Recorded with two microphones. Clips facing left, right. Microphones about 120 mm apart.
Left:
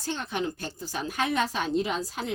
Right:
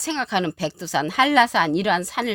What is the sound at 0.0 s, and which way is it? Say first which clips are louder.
A woman's voice: right 7 dB; 90° right.